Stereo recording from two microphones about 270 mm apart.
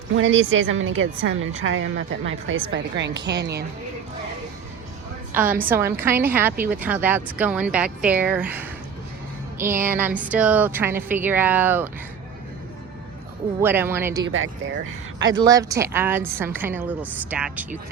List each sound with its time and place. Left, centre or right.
0.1 s a woman's voice: right
5.3 s a woman's voice: centre
13.6 s a woman's voice: centre
15.4 s a woman's voice: centre